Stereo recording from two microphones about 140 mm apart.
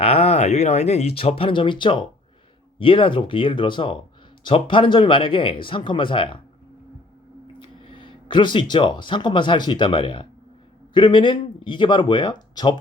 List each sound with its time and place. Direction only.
0.0 s speech: 45° left (ahead or behind)
7.6 s speech: 40° left (ahead or behind)